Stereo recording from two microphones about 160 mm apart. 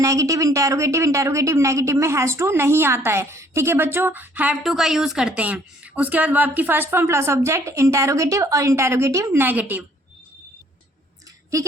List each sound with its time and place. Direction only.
0.0 s a woman's voice: 20° right (ahead or behind)